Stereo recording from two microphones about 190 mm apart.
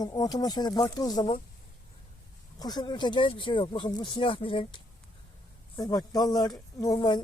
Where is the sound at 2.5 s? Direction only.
20° left (ahead or behind).